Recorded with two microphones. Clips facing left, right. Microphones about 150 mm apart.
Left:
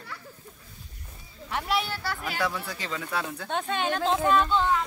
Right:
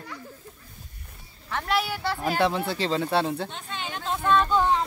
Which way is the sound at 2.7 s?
30° right (ahead or behind).